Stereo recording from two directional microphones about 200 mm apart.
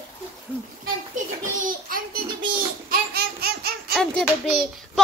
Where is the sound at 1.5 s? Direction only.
45° right (ahead or behind).